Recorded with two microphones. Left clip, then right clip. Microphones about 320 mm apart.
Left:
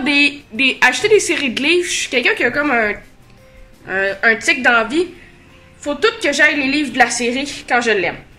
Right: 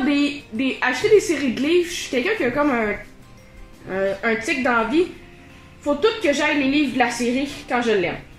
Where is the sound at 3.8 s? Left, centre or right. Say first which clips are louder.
Left 7 dB; left.